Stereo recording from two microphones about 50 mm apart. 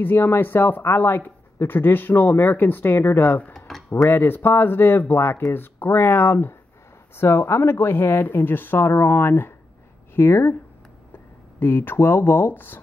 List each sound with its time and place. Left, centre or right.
0.0 s speech: left
3.5 s tick-tock: centre
3.9 s speech: left
7.9 s speech: left
11.6 s speech: left